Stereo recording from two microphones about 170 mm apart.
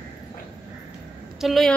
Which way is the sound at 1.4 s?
Centre (ahead or behind).